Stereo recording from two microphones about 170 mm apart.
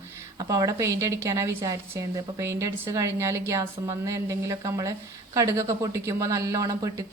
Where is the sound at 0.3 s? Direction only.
20° right (ahead or behind).